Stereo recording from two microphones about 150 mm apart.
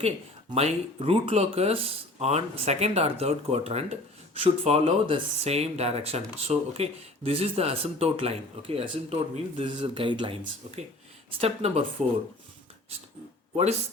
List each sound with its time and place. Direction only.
0.5 s speech: 40° right (ahead or behind)